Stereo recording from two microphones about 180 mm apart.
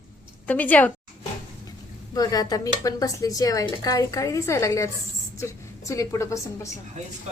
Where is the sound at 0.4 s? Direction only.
10° left (ahead or behind).